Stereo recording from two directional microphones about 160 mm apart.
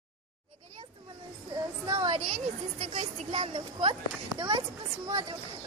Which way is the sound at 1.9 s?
25° right (ahead or behind).